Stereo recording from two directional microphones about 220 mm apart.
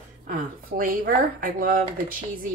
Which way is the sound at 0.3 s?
40° right (ahead or behind).